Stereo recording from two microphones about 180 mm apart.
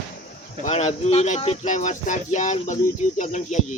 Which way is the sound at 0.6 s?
40° left (ahead or behind).